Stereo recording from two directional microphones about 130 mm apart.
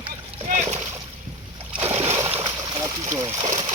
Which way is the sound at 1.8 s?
50° right (ahead or behind).